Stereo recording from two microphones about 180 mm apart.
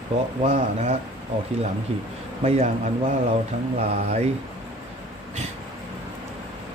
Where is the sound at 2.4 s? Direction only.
35° right (ahead or behind).